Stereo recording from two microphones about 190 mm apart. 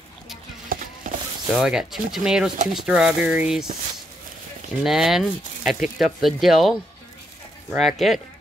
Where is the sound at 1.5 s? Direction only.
5° right (ahead or behind).